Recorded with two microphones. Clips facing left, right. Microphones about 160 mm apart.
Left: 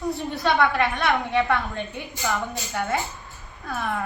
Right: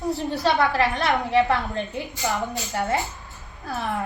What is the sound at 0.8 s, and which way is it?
Speech, 25° right (ahead or behind).